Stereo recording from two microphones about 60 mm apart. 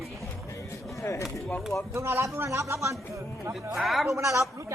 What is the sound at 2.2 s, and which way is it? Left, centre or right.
Speech, right.